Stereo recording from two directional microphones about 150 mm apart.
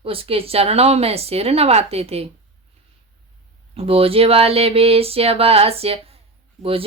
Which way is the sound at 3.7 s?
40° right (ahead or behind).